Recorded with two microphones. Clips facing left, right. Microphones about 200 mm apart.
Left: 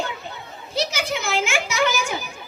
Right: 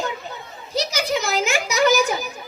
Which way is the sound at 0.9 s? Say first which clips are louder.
Right 3 dB; 40° right (ahead or behind).